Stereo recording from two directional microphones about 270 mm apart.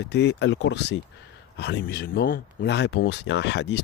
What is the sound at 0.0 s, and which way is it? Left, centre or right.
Speech, left.